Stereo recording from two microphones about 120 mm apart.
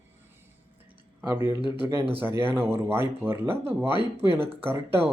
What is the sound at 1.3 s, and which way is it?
A man's voice, 25° right (ahead or behind).